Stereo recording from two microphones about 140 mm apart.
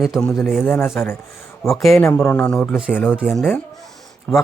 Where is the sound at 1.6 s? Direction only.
Centre (ahead or behind).